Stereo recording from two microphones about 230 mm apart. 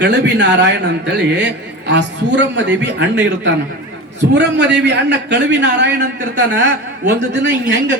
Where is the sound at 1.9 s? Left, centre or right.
Right.